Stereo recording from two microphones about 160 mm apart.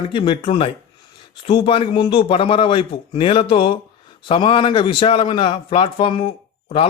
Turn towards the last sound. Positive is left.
turn(degrees=35)  # may be behind; listen again after turning